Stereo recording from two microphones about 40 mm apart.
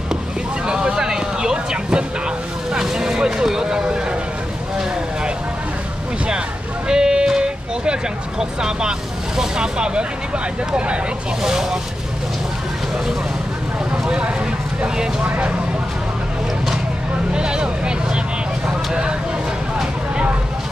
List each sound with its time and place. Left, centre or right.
0.7 s vehicle: right
3.3 s a sound: centre
6.9 s vehicle: centre
9.4 s speech: right
11.4 s speech: centre
17.3 s vehicle: right